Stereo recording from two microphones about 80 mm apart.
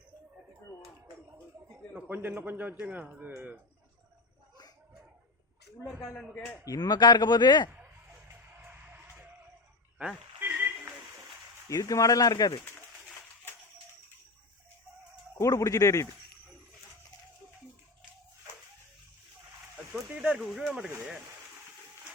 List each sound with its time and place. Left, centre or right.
2.0 s a man's voice: right
6.7 s a man's voice: left
8.4 s music: right
10.4 s a sound: right
11.7 s speech: left
15.4 s speech: left
20.3 s speech: centre